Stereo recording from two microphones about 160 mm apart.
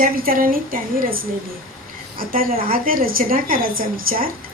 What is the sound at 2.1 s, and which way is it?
A woman's voice, 65° right (ahead or behind).